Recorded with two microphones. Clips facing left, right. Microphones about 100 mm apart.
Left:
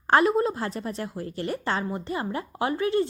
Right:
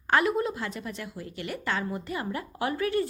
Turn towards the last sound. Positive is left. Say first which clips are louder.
# left 3 dB
turn(degrees=25)  # may be behind; listen again after turning